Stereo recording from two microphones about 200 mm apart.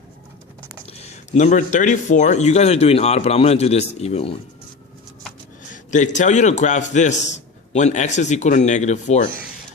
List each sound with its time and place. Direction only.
0.9 s speech: 35° left (ahead or behind)
5.7 s a sound: 40° left (ahead or behind)
6.1 s speech: 35° left (ahead or behind)